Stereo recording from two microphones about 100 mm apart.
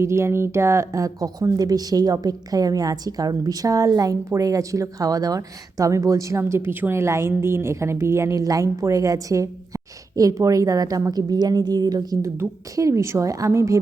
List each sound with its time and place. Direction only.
0.0 s a woman's voice: 30° right (ahead or behind)